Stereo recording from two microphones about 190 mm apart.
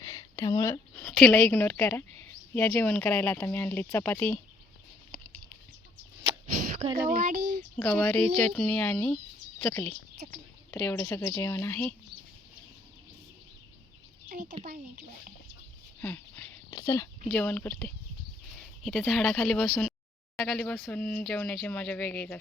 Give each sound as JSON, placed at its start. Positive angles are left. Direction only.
{"t": 0.0, "sound": "a sound", "side_deg": 15}
{"t": 1.2, "sound": "a woman's voice", "side_deg": 5}
{"t": 7.1, "sound": "speech", "side_deg": -45}
{"t": 7.8, "sound": "a woman's voice", "side_deg": 10}
{"t": 14.3, "sound": "a child's voice", "side_deg": -40}
{"t": 16.0, "sound": "a sound", "side_deg": 10}
{"t": 16.8, "sound": "speech", "side_deg": 20}
{"t": 17.2, "sound": "a woman's voice", "side_deg": 5}